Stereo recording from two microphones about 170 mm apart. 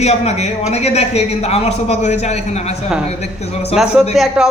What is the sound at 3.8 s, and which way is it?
Speech, 5° right (ahead or behind).